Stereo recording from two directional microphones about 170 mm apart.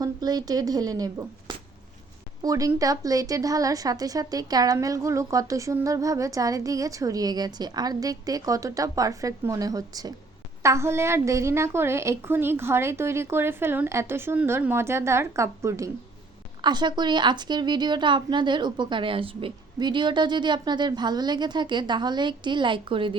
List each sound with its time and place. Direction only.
0.0 s a woman's voice: 25° right (ahead or behind)